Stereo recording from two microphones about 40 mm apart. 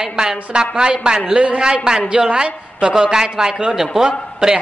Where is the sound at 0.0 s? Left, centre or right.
Centre.